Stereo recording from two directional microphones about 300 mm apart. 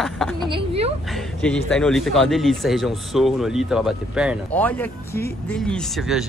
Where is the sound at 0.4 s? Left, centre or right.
Centre.